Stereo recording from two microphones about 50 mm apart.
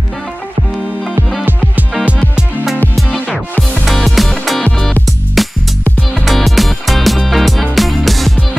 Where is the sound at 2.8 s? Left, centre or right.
Left.